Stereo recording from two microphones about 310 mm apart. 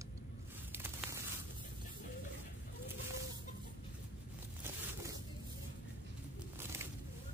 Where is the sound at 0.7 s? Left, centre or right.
Centre.